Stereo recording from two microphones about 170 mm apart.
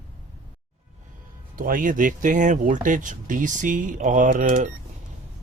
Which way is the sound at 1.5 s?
55° right (ahead or behind).